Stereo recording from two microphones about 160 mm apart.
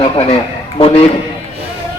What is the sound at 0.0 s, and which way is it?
Speech, 35° left (ahead or behind).